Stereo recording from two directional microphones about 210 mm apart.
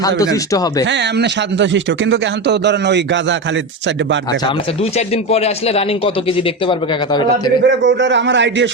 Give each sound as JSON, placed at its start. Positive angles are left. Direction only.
{"t": 0.5, "sound": "speech", "side_deg": 15}
{"t": 0.9, "sound": "speech", "side_deg": -55}
{"t": 4.3, "sound": "speech", "side_deg": 25}
{"t": 7.6, "sound": "speech", "side_deg": -55}